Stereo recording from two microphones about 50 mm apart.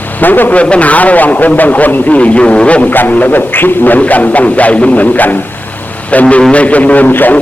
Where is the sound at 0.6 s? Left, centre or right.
Left.